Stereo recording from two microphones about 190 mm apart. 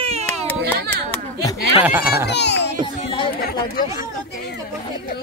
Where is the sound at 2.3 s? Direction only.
65° left (ahead or behind).